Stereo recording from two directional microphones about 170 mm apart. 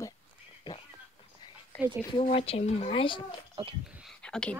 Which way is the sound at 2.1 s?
35° left (ahead or behind).